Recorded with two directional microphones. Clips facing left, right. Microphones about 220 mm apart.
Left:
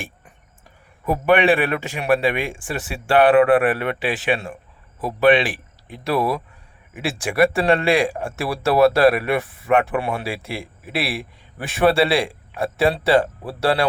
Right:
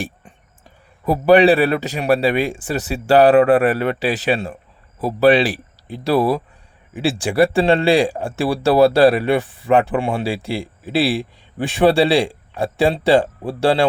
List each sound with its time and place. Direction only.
1.0 s speech: 35° right (ahead or behind)